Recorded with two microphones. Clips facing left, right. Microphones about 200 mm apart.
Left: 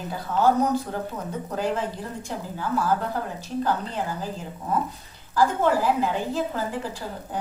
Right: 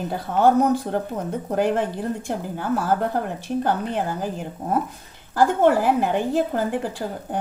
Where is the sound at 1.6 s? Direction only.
55° right (ahead or behind).